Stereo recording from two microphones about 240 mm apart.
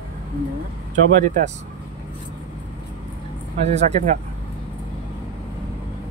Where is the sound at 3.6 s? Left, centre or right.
Right.